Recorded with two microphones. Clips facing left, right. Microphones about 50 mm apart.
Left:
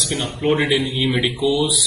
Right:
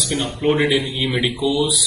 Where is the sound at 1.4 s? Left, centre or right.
Centre.